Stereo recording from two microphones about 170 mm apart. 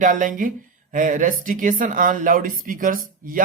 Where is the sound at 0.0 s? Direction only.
50° right (ahead or behind).